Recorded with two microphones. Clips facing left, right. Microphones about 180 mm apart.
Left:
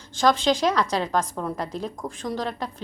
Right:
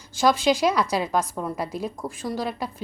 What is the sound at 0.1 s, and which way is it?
Speech, 10° right (ahead or behind).